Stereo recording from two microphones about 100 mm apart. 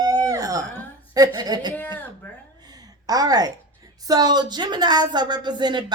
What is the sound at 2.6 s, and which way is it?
A woman's voice, 40° right (ahead or behind).